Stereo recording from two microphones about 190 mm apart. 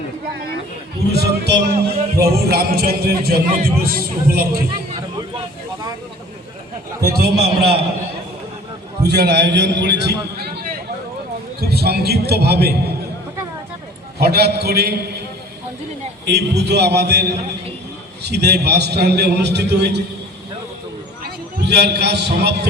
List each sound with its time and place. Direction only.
1.1 s a man's voice: 60° right (ahead or behind)
7.0 s a man's voice: 55° right (ahead or behind)
9.0 s a man's voice: 60° right (ahead or behind)
14.2 s a man's voice: 55° right (ahead or behind)
16.2 s a man's voice: 60° right (ahead or behind)
21.2 s a man's voice: 60° right (ahead or behind)